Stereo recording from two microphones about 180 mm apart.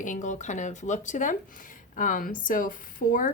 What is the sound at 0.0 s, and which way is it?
Speech, 45° left (ahead or behind).